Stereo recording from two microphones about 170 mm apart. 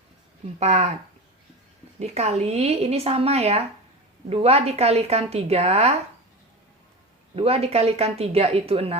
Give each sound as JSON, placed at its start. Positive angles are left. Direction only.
{"t": 0.6, "sound": "speech", "side_deg": -40}
{"t": 2.0, "sound": "speech", "side_deg": -40}
{"t": 7.3, "sound": "speech", "side_deg": -35}